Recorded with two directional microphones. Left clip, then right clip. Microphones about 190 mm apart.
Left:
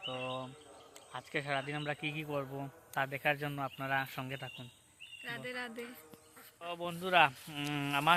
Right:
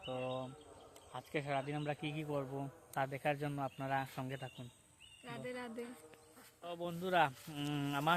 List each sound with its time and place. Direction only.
0.1 s bird: 15° left (ahead or behind)
1.1 s speech: 5° left (ahead or behind)
5.2 s speech: 10° right (ahead or behind)
6.7 s speech: 10° left (ahead or behind)